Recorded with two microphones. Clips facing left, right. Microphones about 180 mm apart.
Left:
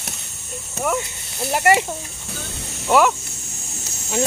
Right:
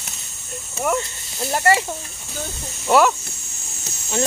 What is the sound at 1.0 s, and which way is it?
Speech, 10° left (ahead or behind).